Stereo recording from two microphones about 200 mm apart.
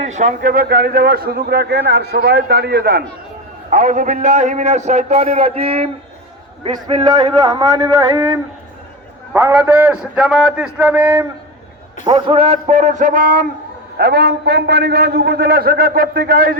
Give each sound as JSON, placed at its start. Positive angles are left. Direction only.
{"t": 0.0, "sound": "a man's voice", "side_deg": -35}
{"t": 3.7, "sound": "a man's voice", "side_deg": -40}
{"t": 12.0, "sound": "a man's voice", "side_deg": -25}